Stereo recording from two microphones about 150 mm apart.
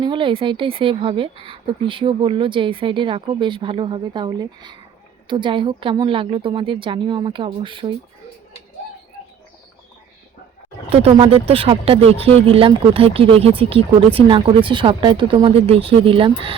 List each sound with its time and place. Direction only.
0.0 s speech: 35° right (ahead or behind)
10.8 s speech: 45° right (ahead or behind)